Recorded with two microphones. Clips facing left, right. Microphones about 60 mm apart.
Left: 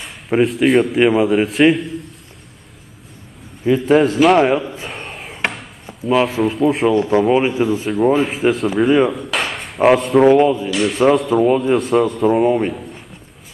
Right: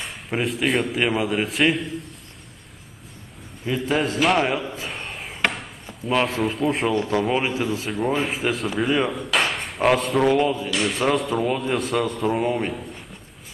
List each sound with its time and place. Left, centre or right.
0.4 s a man's voice: centre
3.8 s a man's voice: centre
4.4 s a man's voice: centre
4.6 s chop: centre
6.0 s a man's voice: centre
7.0 s a man's voice: left
7.2 s a man's voice: centre
10.7 s a man's voice: centre
11.4 s a man's voice: centre
11.7 s a man's voice: centre